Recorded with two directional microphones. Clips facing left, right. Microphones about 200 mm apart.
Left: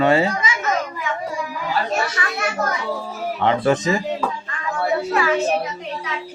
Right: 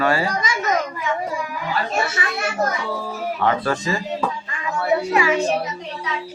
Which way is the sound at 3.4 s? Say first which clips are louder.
Left 4 dB; 20° left (ahead or behind).